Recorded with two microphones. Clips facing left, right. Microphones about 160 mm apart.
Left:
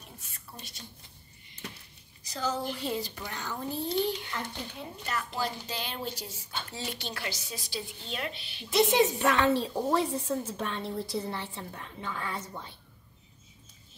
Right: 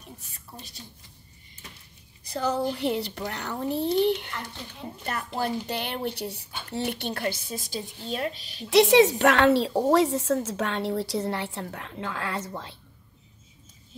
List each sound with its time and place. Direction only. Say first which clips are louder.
2.2 s a woman's voice: right 6 dB; 60° right (ahead or behind)
5.0 s a woman's voice: right 4 dB; 55° right (ahead or behind)
8.6 s a woman's voice: right 7 dB; 80° right